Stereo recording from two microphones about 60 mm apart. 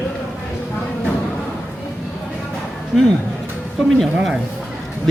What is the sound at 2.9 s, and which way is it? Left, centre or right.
Speech, centre.